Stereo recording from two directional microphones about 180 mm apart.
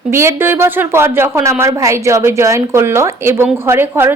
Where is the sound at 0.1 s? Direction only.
15° right (ahead or behind).